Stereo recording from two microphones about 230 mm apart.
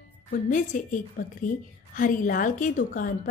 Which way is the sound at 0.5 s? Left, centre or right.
Left.